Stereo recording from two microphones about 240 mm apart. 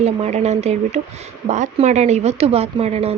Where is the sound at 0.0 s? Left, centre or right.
Right.